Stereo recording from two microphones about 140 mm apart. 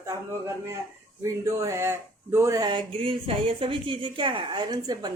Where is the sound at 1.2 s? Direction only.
20° right (ahead or behind).